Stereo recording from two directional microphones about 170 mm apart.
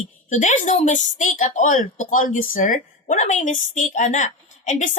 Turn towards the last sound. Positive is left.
turn(degrees=45)  # may be behind; listen again after turning